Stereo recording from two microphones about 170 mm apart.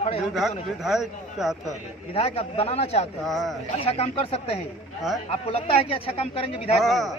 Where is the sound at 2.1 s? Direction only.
35° left (ahead or behind).